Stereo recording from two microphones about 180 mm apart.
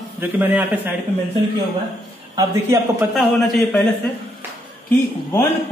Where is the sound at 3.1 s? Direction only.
Centre (ahead or behind).